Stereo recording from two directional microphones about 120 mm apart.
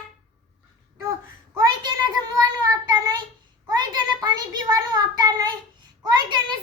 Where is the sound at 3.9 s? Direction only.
35° right (ahead or behind).